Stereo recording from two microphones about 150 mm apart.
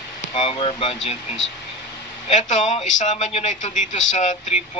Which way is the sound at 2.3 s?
55° left (ahead or behind).